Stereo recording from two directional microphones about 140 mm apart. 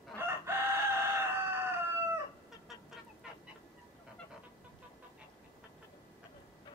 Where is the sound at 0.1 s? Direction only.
15° right (ahead or behind).